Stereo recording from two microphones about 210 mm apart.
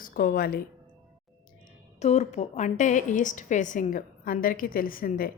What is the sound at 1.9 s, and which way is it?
A woman's voice, 30° left (ahead or behind).